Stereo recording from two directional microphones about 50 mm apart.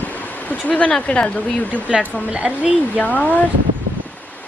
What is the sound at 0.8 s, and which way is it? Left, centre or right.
Speech, centre.